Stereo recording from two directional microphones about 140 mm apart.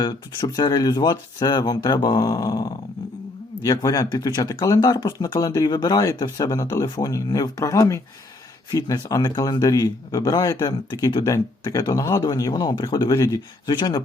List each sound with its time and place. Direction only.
0.0 s speech: 30° left (ahead or behind)